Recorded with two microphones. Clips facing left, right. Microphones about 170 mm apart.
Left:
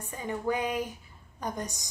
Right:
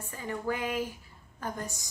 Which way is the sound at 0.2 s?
20° left (ahead or behind).